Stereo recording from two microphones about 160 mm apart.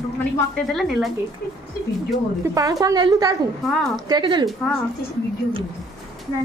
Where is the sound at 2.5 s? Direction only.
20° right (ahead or behind).